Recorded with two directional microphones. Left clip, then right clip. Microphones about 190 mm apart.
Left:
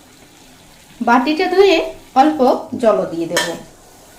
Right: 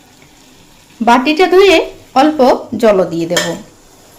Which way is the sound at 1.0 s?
35° right (ahead or behind).